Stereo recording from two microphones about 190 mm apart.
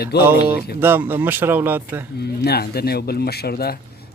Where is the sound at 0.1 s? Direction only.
60° left (ahead or behind).